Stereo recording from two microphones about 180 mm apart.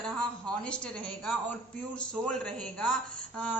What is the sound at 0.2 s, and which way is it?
A man's voice, 5° left (ahead or behind).